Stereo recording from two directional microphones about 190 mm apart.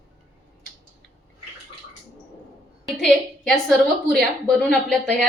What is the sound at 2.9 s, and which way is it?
A woman's voice, centre (ahead or behind).